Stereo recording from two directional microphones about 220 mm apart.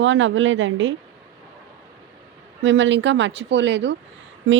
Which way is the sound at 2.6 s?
55° right (ahead or behind).